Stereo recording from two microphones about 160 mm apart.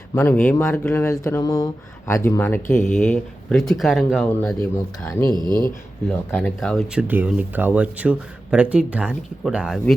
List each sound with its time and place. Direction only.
0.1 s speech: 15° left (ahead or behind)
2.6 s speech: 50° left (ahead or behind)
3.0 s speech: centre (ahead or behind)
5.1 s speech: 20° left (ahead or behind)
5.4 s speech: 25° right (ahead or behind)
6.1 s speech: 5° left (ahead or behind)
7.1 s speech: 10° right (ahead or behind)